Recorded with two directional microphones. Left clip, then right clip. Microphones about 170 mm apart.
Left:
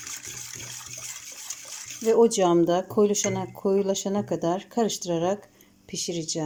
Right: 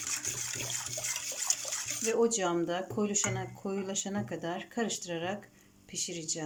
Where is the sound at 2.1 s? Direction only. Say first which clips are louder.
Left 10 dB; 35° left (ahead or behind).